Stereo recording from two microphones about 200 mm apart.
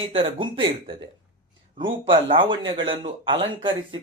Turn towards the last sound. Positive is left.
turn(degrees=-25)  # may be behind; listen again after turning